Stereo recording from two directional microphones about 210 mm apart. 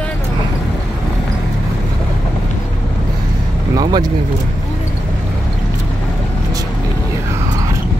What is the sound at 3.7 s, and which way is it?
Speech, 20° right (ahead or behind).